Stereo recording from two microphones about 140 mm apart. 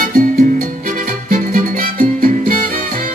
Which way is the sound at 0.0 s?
75° right (ahead or behind).